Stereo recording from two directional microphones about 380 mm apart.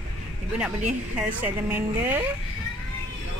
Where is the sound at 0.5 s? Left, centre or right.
Centre.